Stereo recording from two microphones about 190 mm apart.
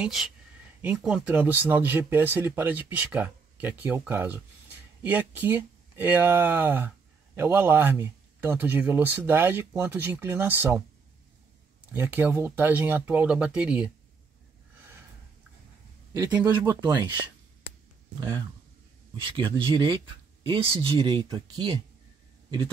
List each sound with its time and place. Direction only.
0.0 s speech: centre (ahead or behind)
11.9 s speech: 10° right (ahead or behind)
16.1 s speech: 15° right (ahead or behind)
18.2 s speech: 25° right (ahead or behind)